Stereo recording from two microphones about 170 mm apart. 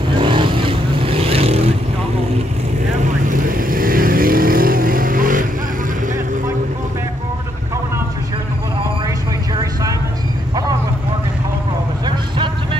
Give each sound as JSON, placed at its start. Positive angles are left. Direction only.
{"t": 0.1, "sound": "vehicle", "side_deg": -30}
{"t": 3.3, "sound": "vehicle", "side_deg": -55}